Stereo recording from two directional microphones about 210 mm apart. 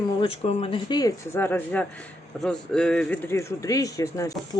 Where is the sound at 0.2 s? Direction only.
25° left (ahead or behind).